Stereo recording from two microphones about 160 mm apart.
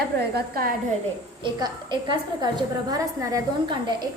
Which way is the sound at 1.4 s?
30° right (ahead or behind).